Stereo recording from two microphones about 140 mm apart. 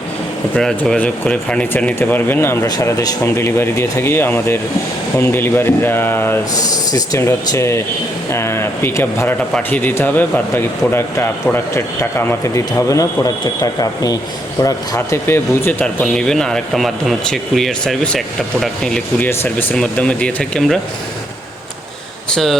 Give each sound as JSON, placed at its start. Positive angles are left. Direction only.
{"t": 0.5, "sound": "a man's voice", "side_deg": 10}
{"t": 2.6, "sound": "a man's voice", "side_deg": 25}
{"t": 6.5, "sound": "a man's voice", "side_deg": 25}
{"t": 16.0, "sound": "a man's voice", "side_deg": 5}